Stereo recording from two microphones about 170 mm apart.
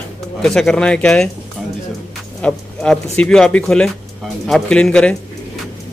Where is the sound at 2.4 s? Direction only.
5° left (ahead or behind).